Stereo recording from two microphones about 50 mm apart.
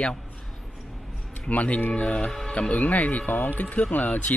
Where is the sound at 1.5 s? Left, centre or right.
Left.